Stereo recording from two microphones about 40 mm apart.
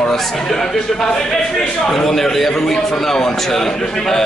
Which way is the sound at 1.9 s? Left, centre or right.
Centre.